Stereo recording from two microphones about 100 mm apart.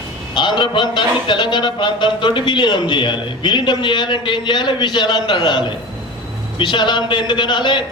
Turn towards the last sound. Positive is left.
turn(degrees=50)  # may be behind; listen again after turning